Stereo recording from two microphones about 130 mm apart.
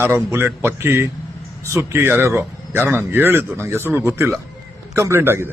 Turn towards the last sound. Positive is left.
turn(degrees=-20)  # may be behind; listen again after turning